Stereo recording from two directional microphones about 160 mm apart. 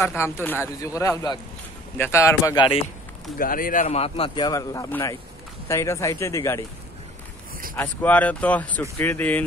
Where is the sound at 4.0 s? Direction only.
35° left (ahead or behind); by 6.6 s 20° left (ahead or behind).